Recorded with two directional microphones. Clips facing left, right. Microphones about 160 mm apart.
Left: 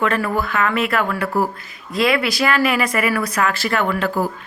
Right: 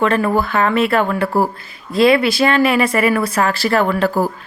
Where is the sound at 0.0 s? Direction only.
30° right (ahead or behind).